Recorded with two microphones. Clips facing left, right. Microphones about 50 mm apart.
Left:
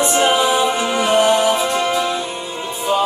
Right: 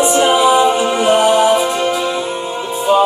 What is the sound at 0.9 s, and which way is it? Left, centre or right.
Music, right.